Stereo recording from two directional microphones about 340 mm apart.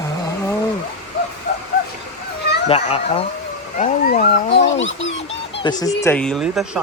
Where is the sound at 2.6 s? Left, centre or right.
Centre; by 5.6 s left.